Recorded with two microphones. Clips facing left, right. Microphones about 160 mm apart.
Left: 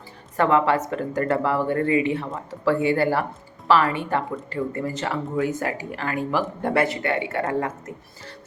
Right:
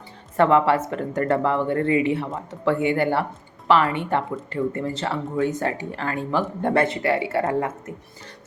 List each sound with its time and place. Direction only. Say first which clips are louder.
0.3 s speech: right 2 dB; 25° right (ahead or behind)